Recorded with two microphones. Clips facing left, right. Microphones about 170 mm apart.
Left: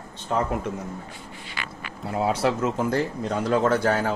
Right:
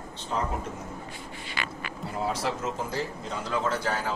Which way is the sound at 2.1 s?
70° left (ahead or behind).